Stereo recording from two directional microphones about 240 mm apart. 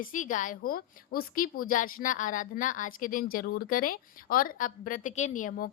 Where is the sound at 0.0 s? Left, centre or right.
Left.